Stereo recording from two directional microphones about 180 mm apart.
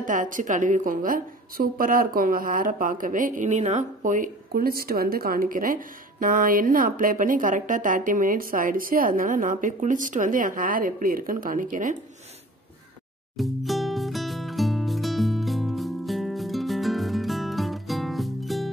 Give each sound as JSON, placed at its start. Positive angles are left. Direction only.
{"t": 0.0, "sound": "a woman's voice", "side_deg": -45}
{"t": 13.4, "sound": "music", "side_deg": 0}